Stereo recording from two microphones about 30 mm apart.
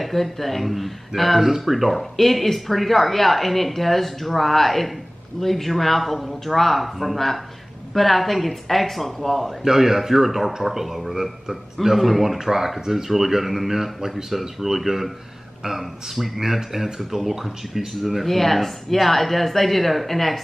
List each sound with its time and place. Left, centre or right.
0.0 s speech: centre
9.6 s speech: centre